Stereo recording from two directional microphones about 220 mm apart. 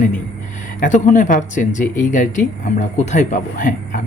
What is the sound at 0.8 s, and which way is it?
Speech, 35° left (ahead or behind).